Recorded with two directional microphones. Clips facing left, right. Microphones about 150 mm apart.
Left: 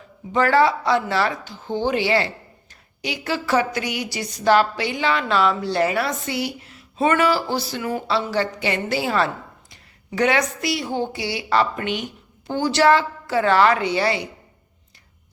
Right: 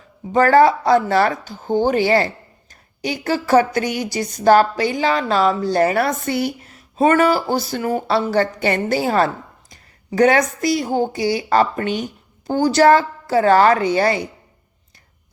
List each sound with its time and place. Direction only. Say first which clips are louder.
0.3 s a woman's voice: right 5 dB; 45° right (ahead or behind)